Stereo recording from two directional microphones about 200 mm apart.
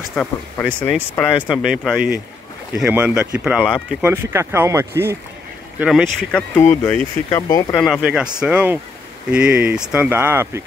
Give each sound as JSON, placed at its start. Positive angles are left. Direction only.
{"t": 0.1, "sound": "speech", "side_deg": 5}
{"t": 5.8, "sound": "speech", "side_deg": 0}
{"t": 7.2, "sound": "speech", "side_deg": 20}
{"t": 7.8, "sound": "speech", "side_deg": 0}